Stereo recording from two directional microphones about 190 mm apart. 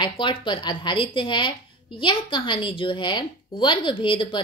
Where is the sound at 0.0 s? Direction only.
25° left (ahead or behind).